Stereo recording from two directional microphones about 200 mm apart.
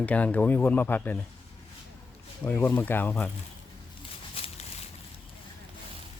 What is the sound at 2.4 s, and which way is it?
Speech, 10° left (ahead or behind).